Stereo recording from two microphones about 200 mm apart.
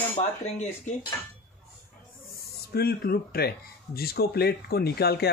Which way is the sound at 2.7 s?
50° left (ahead or behind).